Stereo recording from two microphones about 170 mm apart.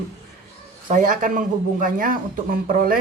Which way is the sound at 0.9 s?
50° right (ahead or behind).